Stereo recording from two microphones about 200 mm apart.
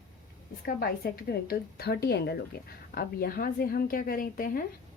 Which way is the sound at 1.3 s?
50° left (ahead or behind).